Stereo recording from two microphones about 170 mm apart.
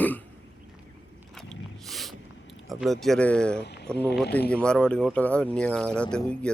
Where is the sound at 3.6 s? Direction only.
80° left.